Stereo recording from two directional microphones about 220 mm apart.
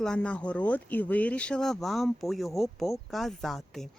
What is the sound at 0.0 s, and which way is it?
Speech, 5° left (ahead or behind).